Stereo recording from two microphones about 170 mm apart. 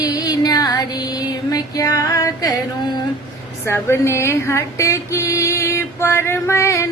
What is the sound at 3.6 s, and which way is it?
Female singing, 15° left (ahead or behind).